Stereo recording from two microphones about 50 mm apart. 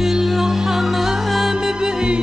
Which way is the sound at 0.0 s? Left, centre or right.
Centre.